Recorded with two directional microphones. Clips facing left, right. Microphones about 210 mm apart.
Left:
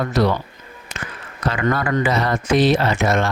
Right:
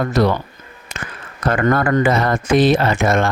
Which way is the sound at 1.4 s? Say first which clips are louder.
Right 4 dB; 50° right (ahead or behind).